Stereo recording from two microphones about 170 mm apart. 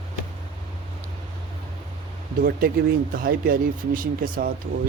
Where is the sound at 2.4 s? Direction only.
55° right (ahead or behind).